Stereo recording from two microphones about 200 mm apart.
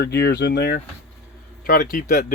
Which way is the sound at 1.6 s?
45° left (ahead or behind).